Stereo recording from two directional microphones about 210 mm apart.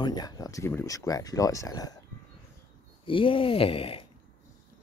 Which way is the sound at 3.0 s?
25° left (ahead or behind).